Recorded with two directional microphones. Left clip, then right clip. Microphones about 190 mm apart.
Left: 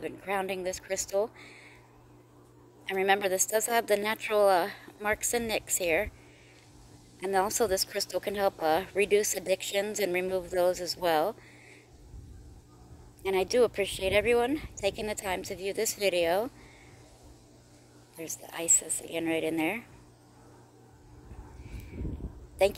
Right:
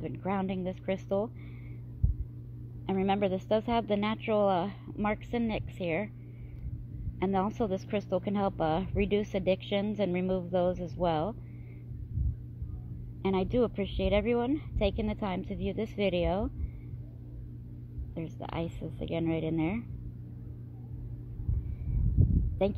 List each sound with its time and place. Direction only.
0.0 s speech: 10° left (ahead or behind)
2.9 s speech: 15° left (ahead or behind)
7.2 s speech: 15° left (ahead or behind)
13.2 s speech: 15° left (ahead or behind)
18.2 s speech: 10° left (ahead or behind)